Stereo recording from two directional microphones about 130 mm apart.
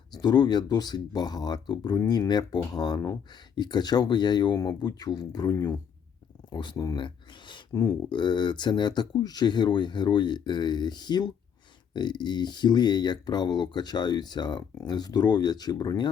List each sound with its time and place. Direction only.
0.2 s speech: 30° left (ahead or behind)